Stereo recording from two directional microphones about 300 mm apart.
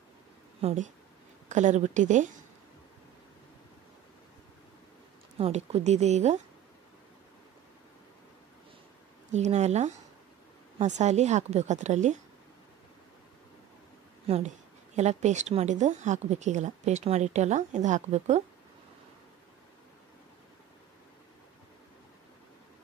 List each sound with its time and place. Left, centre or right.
0.6 s speech: right
5.4 s speech: right
9.3 s speech: right
14.2 s speech: right